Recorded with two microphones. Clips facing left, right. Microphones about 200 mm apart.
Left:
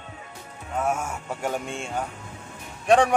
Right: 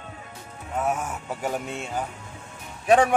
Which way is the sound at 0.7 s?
Centre (ahead or behind).